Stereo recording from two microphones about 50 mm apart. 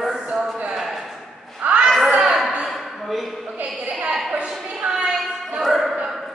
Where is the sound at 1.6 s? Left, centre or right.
Right.